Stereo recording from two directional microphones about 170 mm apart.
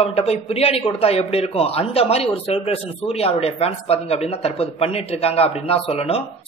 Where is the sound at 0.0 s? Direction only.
35° left (ahead or behind).